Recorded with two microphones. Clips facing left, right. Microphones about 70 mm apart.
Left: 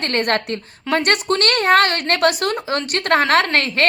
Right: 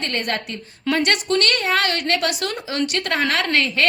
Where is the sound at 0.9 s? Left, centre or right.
Left.